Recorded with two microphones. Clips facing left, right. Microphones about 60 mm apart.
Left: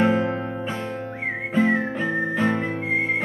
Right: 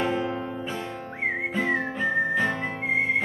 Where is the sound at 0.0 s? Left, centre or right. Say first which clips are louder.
Left 6 dB; left.